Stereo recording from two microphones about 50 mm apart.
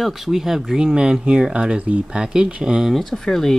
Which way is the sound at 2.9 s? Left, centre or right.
Centre.